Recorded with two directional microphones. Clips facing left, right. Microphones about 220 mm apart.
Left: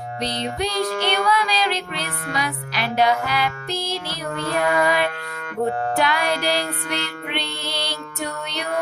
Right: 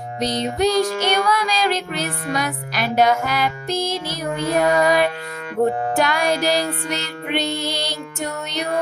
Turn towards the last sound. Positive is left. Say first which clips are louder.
# right 5 dB
turn(degrees=-45)  # may be behind; listen again after turning